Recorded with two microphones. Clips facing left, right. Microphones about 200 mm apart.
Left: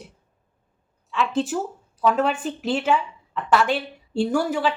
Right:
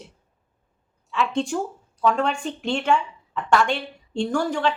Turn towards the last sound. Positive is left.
turn(degrees=5)  # may be behind; listen again after turning